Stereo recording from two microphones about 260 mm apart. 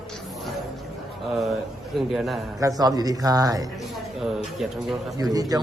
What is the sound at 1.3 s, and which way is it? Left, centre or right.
A man's voice, centre.